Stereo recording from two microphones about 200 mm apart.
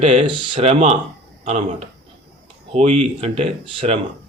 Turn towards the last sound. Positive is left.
turn(degrees=-30)  # may be behind; listen again after turning